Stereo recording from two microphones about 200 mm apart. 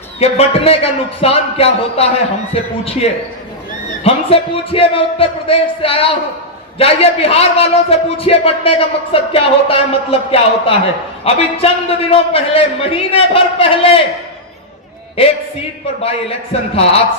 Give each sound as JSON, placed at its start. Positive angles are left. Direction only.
{"t": 0.2, "sound": "a man's voice", "side_deg": 30}
{"t": 16.0, "sound": "a man's voice", "side_deg": 30}